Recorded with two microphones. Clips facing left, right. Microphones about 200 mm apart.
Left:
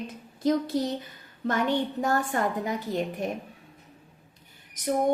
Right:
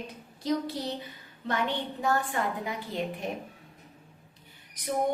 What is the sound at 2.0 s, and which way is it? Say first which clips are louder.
A woman's voice: left 3 dB; 45° left (ahead or behind).